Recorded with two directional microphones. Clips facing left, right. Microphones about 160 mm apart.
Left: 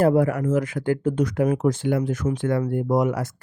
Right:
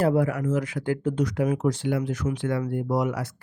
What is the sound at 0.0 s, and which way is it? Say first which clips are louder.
Speech: left 4 dB; 50° left (ahead or behind).